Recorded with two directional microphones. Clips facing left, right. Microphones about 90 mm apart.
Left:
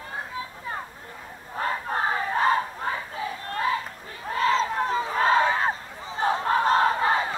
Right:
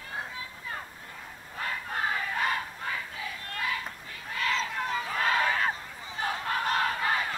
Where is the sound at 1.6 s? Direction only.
35° left (ahead or behind).